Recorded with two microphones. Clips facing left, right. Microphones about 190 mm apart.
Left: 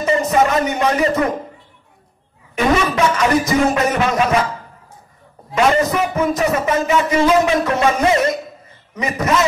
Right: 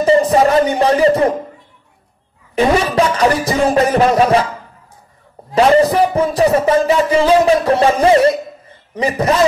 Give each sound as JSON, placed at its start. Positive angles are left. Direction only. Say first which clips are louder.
{"t": 0.0, "sound": "music", "louder": "right 5 dB", "side_deg": -30}
{"t": 2.5, "sound": "a man's voice", "louder": "right 3 dB", "side_deg": -30}
{"t": 5.5, "sound": "a man's voice", "louder": "right 5 dB", "side_deg": -35}